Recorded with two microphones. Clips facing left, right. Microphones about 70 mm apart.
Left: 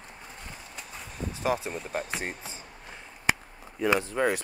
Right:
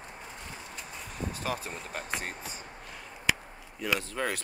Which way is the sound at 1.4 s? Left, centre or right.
Centre.